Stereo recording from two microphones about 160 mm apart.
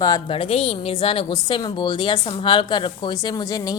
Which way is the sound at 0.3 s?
35° left (ahead or behind).